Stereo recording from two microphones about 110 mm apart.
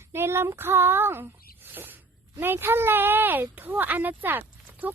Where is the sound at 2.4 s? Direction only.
20° right (ahead or behind).